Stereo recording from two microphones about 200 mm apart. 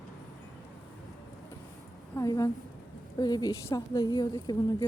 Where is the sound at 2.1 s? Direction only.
15° left (ahead or behind).